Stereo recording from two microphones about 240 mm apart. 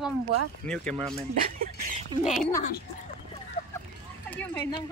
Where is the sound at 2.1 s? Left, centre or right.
Centre.